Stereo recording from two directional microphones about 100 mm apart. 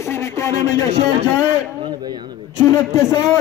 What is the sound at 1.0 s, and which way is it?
Speech, 90° right.